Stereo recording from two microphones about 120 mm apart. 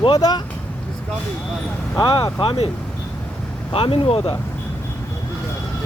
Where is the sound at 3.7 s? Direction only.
50° left (ahead or behind).